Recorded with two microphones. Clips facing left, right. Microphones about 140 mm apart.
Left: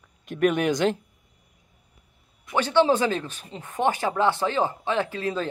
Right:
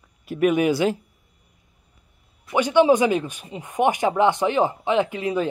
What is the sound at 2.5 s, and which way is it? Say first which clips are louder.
Speech: right 4 dB; 15° right (ahead or behind).